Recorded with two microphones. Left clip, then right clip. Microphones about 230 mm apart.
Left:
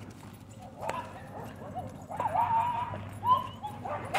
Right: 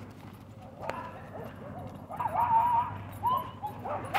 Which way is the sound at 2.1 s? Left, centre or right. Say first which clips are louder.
Right 1 dB; left.